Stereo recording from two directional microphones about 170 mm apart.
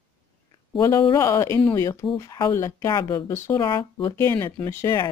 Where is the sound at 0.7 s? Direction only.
20° left (ahead or behind).